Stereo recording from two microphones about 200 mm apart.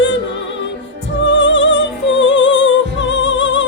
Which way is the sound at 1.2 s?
65° left (ahead or behind).